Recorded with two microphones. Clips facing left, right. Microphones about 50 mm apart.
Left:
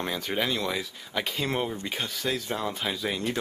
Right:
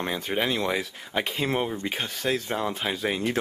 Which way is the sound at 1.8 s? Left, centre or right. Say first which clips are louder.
Right 3 dB; right.